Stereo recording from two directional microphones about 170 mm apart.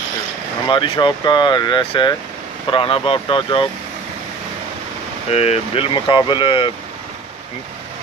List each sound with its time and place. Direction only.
0.7 s speech: 30° left (ahead or behind)
5.3 s speech: 35° left (ahead or behind)